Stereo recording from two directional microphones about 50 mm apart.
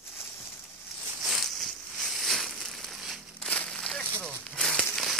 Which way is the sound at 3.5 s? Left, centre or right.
Centre.